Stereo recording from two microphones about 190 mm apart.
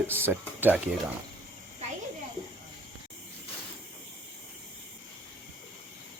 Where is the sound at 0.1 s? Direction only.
10° right (ahead or behind).